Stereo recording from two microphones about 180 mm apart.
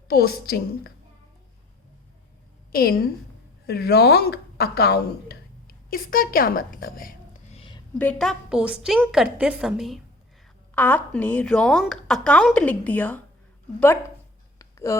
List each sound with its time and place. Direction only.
0.1 s a woman's voice: 60° left (ahead or behind)
2.7 s a woman's voice: 55° left (ahead or behind)
7.5 s a sound: 30° left (ahead or behind)
7.9 s a woman's voice: 5° left (ahead or behind)
10.8 s a woman's voice: 10° left (ahead or behind)
14.6 s a sound: 20° left (ahead or behind)